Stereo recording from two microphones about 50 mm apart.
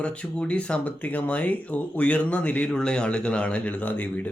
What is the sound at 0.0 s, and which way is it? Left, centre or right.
Speech, left.